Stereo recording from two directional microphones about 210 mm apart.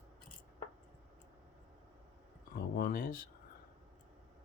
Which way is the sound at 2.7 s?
45° left (ahead or behind).